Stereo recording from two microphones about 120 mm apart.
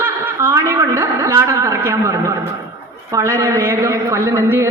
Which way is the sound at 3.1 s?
25° right (ahead or behind).